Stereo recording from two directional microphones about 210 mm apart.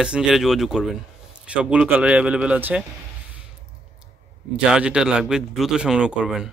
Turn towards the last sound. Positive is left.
turn(degrees=-5)  # may be behind; listen again after turning